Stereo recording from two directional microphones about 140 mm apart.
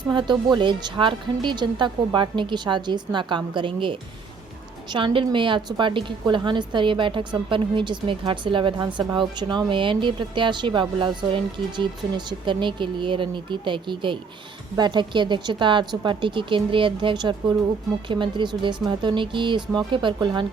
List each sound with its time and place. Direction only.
0.1 s speech: 30° right (ahead or behind)